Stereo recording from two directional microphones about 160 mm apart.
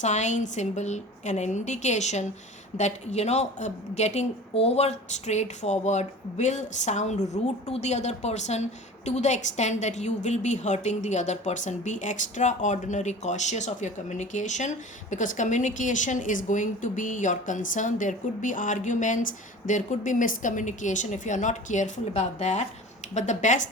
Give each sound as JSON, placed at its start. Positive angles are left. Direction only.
{"t": 0.0, "sound": "a woman's voice", "side_deg": 45}